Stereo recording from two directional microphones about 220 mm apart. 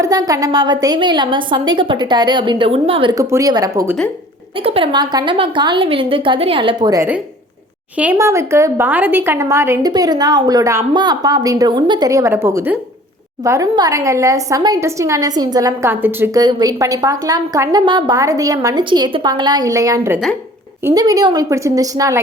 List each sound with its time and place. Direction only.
0.0 s a woman's voice: 15° right (ahead or behind)